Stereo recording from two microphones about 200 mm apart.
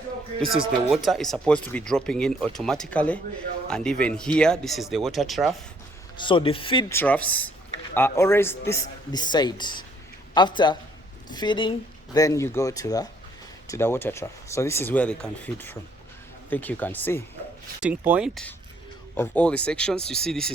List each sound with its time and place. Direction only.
0.3 s speech: centre (ahead or behind)
6.1 s speech: 25° left (ahead or behind)
6.9 s speech: 10° left (ahead or behind)
17.7 s speech: 5° right (ahead or behind)
19.1 s speech: 10° left (ahead or behind)